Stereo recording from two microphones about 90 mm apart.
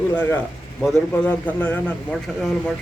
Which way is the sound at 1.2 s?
15° left (ahead or behind).